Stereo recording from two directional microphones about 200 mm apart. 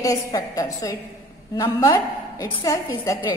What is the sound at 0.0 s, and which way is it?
A woman's voice, 15° left (ahead or behind).